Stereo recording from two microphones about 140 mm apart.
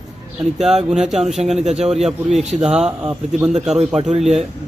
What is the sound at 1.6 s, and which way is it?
Speech, 50° right (ahead or behind).